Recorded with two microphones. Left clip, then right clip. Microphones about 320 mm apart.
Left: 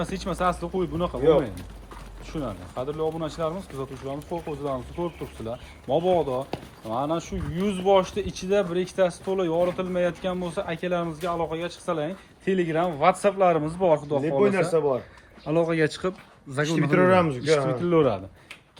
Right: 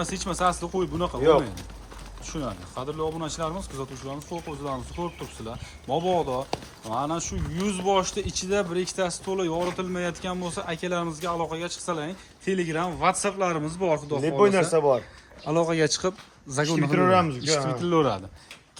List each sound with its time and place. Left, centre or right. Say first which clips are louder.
0.0 s speech: right 1 dB; centre
2.2 s speech: even; centre
14.7 s speech: right 2 dB; right
15.4 s speech: even; centre